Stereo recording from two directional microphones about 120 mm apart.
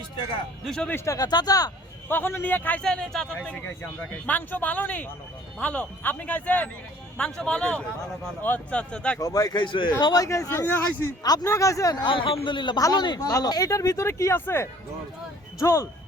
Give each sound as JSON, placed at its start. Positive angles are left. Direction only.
{"t": 0.6, "sound": "speech", "side_deg": 0}
{"t": 0.9, "sound": "speech", "side_deg": 25}
{"t": 2.0, "sound": "a man's voice", "side_deg": 15}
{"t": 9.1, "sound": "speech", "side_deg": 30}
{"t": 12.0, "sound": "a man's voice", "side_deg": 45}
{"t": 13.1, "sound": "speech", "side_deg": 25}